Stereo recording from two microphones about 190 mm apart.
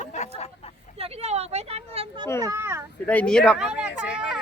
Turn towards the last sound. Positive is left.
turn(degrees=-5)  # may be behind; listen again after turning